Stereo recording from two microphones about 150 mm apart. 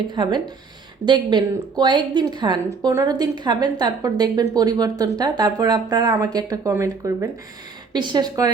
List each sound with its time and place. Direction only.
0.1 s a woman's voice: 30° right (ahead or behind)